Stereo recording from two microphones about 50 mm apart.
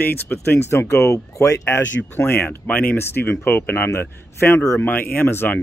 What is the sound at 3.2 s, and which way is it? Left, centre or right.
Speech, left.